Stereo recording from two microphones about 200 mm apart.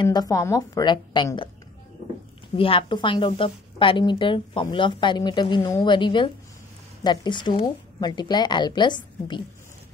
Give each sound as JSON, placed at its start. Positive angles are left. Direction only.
{"t": 0.0, "sound": "a woman's voice", "side_deg": 20}
{"t": 2.5, "sound": "a woman's voice", "side_deg": 25}